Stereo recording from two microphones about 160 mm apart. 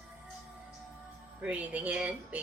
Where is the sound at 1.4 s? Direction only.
10° right (ahead or behind).